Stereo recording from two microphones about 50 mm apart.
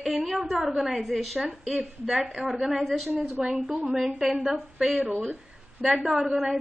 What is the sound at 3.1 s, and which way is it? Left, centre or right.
A woman's voice, centre.